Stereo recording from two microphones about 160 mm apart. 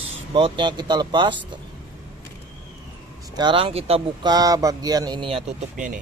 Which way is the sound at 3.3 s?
30° right (ahead or behind).